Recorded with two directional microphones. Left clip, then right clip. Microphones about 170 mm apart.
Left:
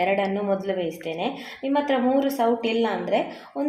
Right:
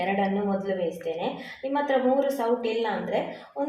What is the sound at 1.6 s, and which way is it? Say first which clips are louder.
A woman's voice: left 1 dB; 40° left (ahead or behind).